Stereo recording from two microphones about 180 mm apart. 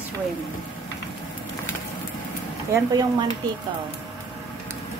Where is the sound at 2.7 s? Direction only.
20° right (ahead or behind).